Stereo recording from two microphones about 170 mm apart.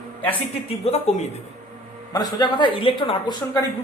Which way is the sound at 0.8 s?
40° left (ahead or behind).